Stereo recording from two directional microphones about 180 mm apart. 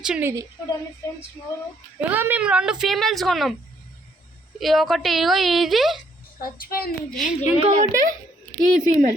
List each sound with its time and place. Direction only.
0.0 s a woman's voice: 10° right (ahead or behind)
2.0 s a woman's voice: 10° right (ahead or behind)
4.6 s a woman's voice: centre (ahead or behind)
6.4 s a woman's voice: 55° left (ahead or behind)
7.1 s a woman's voice: centre (ahead or behind)
7.6 s a woman's voice: 45° right (ahead or behind)